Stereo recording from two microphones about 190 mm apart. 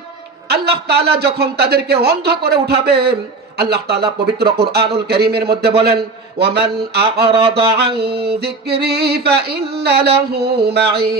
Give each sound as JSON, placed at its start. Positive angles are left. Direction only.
{"t": 0.5, "sound": "a man's voice", "side_deg": -60}